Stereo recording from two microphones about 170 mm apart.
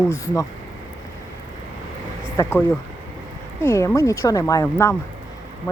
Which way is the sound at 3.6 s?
15° left (ahead or behind).